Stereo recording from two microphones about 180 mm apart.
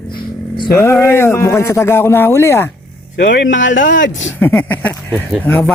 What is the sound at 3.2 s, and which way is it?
Speech, 85° left.